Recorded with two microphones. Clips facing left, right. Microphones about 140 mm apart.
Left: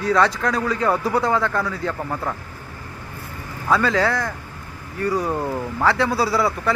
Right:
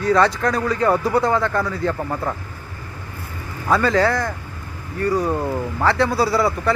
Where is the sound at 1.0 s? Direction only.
5° left (ahead or behind).